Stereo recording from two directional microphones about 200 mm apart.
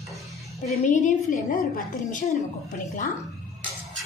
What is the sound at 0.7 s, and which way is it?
Speech, 35° left (ahead or behind).